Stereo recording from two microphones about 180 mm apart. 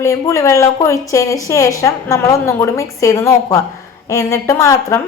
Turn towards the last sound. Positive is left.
turn(degrees=15)  # may be behind; listen again after turning